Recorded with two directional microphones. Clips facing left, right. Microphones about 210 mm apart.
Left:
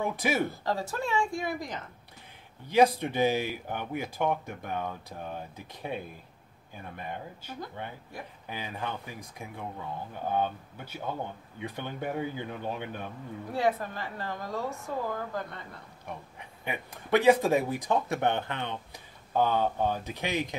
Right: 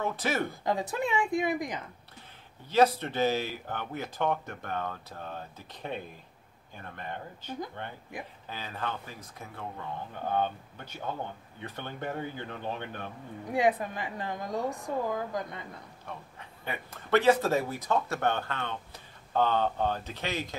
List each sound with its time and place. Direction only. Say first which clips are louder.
0.0 s speech: left 2 dB; 10° left (ahead or behind)
0.7 s a woman's voice: right 1 dB; 15° right (ahead or behind)
2.7 s speech: left 1 dB; 15° left (ahead or behind)
13.5 s a woman's voice: right 2 dB; 15° right (ahead or behind)
16.1 s speech: left 2 dB; 15° left (ahead or behind)